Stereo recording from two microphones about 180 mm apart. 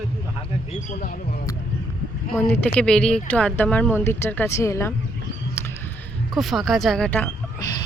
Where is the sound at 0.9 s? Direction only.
50° left (ahead or behind).